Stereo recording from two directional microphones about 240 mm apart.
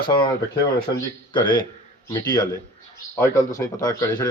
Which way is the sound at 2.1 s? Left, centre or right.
Centre.